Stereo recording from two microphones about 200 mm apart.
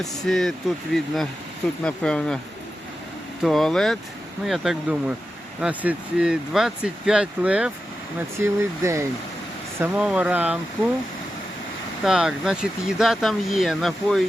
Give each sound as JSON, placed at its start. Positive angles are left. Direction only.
{"t": 0.0, "sound": "speech", "side_deg": 0}
{"t": 3.4, "sound": "speech", "side_deg": 0}
{"t": 12.0, "sound": "speech", "side_deg": 0}